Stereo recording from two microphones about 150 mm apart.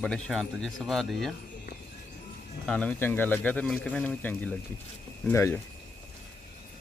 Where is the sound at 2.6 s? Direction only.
5° left (ahead or behind).